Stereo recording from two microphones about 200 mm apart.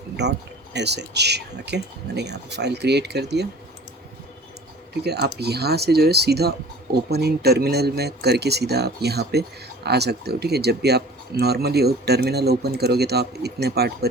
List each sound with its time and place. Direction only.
0.2 s speech: 60° right (ahead or behind)
5.0 s speech: 55° right (ahead or behind)